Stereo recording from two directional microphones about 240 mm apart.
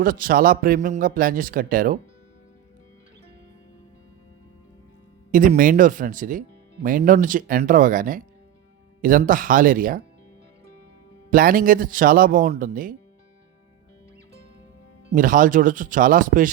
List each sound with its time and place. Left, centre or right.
0.0 s speech: right
5.3 s speech: right
11.3 s speech: right
15.1 s speech: right